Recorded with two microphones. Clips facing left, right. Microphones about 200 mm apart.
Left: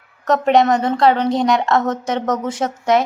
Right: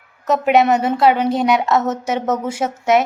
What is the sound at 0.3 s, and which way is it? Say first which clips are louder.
A woman's voice: even; 5° right (ahead or behind).